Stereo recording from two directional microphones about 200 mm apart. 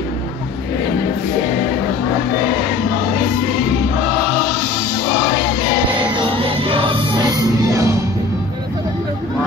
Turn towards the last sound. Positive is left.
turn(degrees=-15)  # may be behind; listen again after turning